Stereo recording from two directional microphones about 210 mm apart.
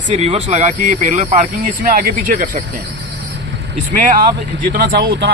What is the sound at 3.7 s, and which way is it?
Speech, 40° right (ahead or behind).